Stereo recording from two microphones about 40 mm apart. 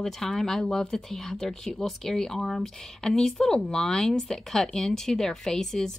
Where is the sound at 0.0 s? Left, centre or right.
Centre.